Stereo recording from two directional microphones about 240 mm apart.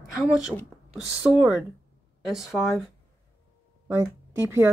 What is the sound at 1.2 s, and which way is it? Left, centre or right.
A woman's voice, centre.